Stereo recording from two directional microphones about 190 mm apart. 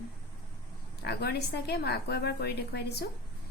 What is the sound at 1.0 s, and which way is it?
A woman's voice, 60° left (ahead or behind).